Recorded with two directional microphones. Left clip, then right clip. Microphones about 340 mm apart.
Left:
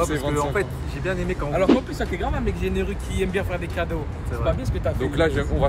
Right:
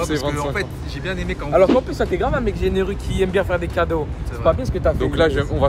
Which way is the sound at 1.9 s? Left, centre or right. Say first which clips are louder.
Right 7 dB; centre.